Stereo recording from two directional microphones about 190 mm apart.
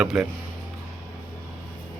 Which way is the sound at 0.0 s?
5° right (ahead or behind).